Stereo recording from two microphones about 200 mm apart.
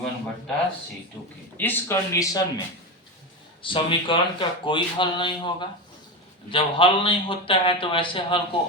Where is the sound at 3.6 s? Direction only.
25° left (ahead or behind).